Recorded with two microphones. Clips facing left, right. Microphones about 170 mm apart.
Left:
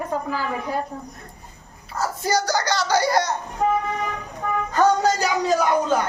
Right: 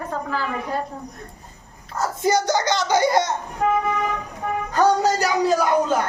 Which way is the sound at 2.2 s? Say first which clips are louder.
Right 3 dB; 25° right (ahead or behind).